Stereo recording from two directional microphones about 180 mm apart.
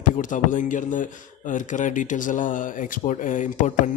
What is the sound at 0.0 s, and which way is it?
Speech, 45° left (ahead or behind).